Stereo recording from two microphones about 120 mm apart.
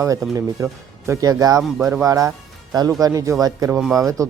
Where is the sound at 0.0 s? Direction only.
25° right (ahead or behind).